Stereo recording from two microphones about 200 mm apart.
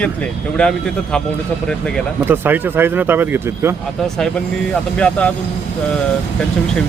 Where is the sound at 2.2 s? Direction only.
10° right (ahead or behind).